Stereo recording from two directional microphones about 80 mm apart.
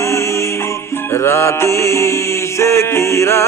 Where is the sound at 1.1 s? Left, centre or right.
Left.